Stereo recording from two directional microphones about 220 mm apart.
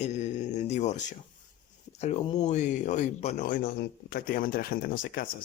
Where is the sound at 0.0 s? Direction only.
30° left (ahead or behind).